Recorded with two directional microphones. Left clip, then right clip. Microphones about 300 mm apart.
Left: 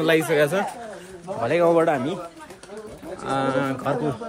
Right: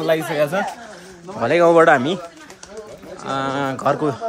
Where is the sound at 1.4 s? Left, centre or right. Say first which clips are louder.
Right 6 dB; right.